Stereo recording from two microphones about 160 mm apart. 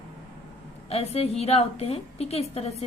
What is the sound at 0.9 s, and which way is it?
A woman's voice, 40° left (ahead or behind).